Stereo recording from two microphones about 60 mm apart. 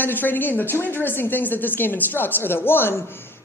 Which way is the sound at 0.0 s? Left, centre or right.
Left.